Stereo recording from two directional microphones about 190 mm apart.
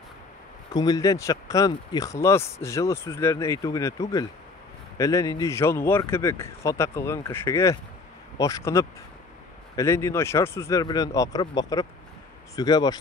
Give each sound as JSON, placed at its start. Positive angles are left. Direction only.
{"t": 0.7, "sound": "speech", "side_deg": 20}